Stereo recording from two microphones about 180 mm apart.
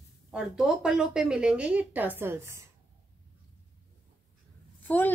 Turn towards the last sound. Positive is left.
turn(degrees=10)  # may be behind; listen again after turning